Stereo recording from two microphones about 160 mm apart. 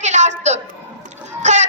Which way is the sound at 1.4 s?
45° right (ahead or behind).